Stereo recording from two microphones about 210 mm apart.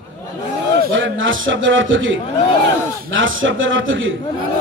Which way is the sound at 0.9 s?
65° right (ahead or behind).